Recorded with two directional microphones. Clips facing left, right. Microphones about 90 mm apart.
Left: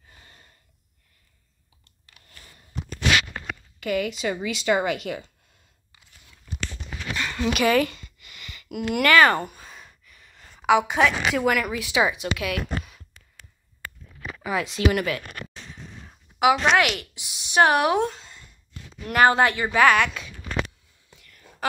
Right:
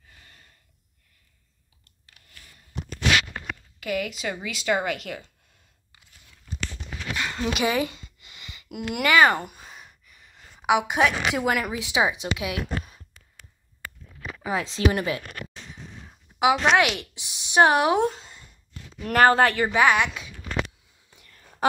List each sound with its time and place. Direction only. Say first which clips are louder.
0.1 s a sound: left 2 dB; 25° left (ahead or behind)
3.8 s a woman's voice: left 3 dB; 5° right (ahead or behind)
7.2 s a sound: left 2 dB; 15° right (ahead or behind)
11.4 s speech: left 2 dB; 25° right (ahead or behind)
14.4 s speech: even; 30° right (ahead or behind)
16.3 s speech: left 1 dB; 20° right (ahead or behind)
19.0 s speech: even; 40° right (ahead or behind)
19.7 s speech: left 2 dB; 15° right (ahead or behind)
21.2 s whispering: right 5 dB; 25° right (ahead or behind)